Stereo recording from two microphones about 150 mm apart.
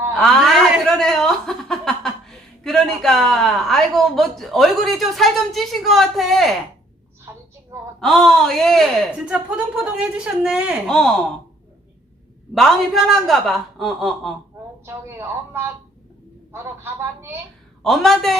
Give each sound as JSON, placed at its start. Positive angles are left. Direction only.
{"t": 0.2, "sound": "chuckle", "side_deg": 5}
{"t": 7.3, "sound": "a sound", "side_deg": -20}
{"t": 8.0, "sound": "speech", "side_deg": 0}
{"t": 9.2, "sound": "speech", "side_deg": -10}
{"t": 12.5, "sound": "speech", "side_deg": 0}
{"t": 14.8, "sound": "speech", "side_deg": -15}
{"t": 17.8, "sound": "speech", "side_deg": 0}